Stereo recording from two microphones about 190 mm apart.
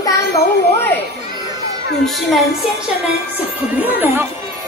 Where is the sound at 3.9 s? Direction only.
10° right (ahead or behind).